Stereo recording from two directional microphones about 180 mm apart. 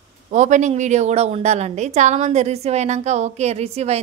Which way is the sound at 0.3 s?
40° right (ahead or behind).